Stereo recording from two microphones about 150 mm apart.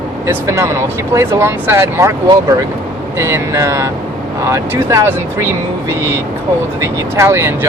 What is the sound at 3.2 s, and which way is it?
Speech, 20° right (ahead or behind).